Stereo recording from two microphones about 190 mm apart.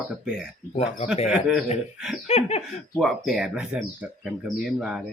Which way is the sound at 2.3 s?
35° left (ahead or behind).